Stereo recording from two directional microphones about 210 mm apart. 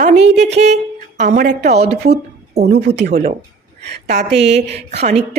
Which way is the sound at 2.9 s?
55° right (ahead or behind).